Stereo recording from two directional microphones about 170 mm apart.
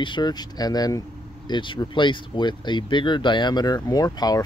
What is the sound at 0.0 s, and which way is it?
Speech, 25° left (ahead or behind).